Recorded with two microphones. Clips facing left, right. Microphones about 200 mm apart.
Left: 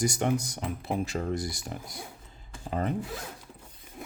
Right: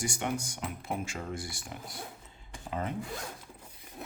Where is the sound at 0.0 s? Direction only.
40° left (ahead or behind).